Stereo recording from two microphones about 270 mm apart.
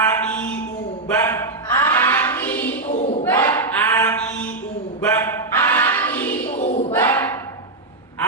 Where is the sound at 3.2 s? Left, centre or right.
Centre.